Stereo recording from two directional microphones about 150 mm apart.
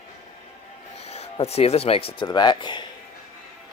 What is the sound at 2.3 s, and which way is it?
Speech, 30° left (ahead or behind).